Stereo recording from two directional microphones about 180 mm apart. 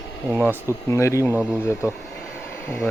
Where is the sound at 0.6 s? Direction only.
15° left (ahead or behind).